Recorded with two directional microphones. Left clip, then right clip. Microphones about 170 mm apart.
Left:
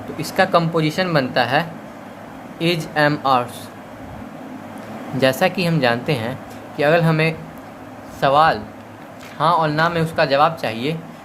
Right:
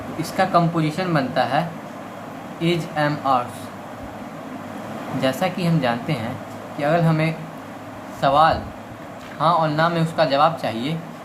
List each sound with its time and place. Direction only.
0.2 s speech: 60° left (ahead or behind)
5.2 s speech: 60° left (ahead or behind)